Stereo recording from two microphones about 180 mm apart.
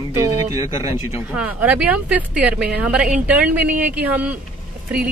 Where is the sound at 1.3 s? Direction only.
10° right (ahead or behind).